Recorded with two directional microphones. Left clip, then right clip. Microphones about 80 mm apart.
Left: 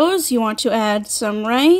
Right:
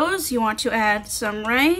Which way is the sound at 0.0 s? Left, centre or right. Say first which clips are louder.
Left 4 dB; left.